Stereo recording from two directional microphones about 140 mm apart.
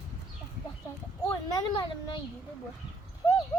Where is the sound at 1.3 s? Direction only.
30° left (ahead or behind).